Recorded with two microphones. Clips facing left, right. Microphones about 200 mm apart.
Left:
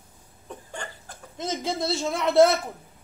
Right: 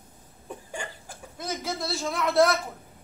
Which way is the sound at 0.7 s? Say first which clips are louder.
Right 1 dB; 10° right (ahead or behind).